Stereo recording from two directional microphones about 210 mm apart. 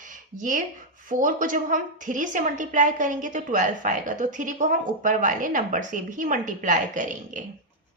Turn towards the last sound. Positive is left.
turn(degrees=-35)  # may be behind; listen again after turning